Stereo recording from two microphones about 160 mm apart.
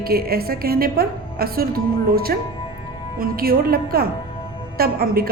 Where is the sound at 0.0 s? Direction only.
70° right (ahead or behind).